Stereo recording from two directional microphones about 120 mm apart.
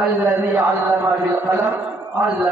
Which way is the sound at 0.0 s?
15° right (ahead or behind).